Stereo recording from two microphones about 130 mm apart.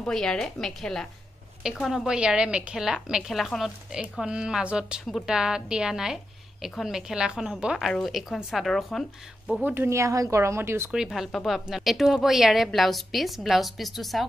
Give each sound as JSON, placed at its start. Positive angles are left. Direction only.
{"t": 0.0, "sound": "a woman's voice", "side_deg": 5}
{"t": 9.7, "sound": "speech", "side_deg": -20}
{"t": 10.9, "sound": "a woman's voice", "side_deg": -5}